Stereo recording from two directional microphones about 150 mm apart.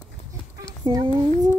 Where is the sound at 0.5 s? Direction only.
25° right (ahead or behind).